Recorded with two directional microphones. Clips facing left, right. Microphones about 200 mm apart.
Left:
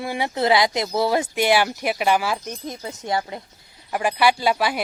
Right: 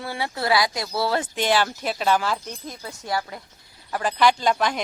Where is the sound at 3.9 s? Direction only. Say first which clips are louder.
Left 1 dB; 10° left (ahead or behind).